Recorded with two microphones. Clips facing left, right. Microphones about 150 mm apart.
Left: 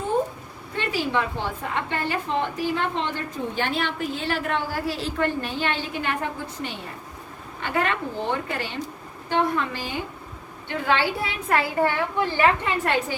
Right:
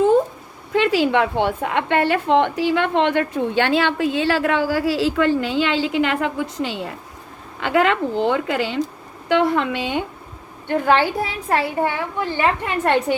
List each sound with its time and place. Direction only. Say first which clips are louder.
0.7 s a woman's voice: right 9 dB; 90° right
10.7 s a woman's voice: right 6 dB; 50° right (ahead or behind)
11.8 s a woman's voice: right 1 dB; 15° right (ahead or behind)